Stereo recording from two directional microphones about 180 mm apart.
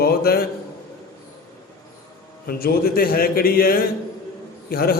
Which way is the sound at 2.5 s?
55° left (ahead or behind).